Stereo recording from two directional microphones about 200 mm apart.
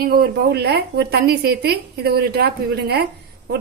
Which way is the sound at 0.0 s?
50° right (ahead or behind).